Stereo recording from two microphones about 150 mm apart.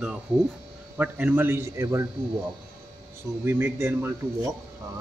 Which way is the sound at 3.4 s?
15° right (ahead or behind).